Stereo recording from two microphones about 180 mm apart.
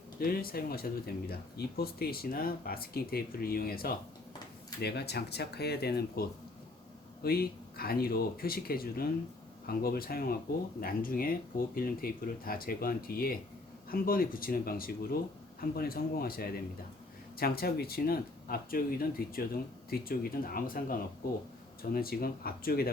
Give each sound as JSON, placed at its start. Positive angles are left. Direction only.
{"t": 0.2, "sound": "speech", "side_deg": 55}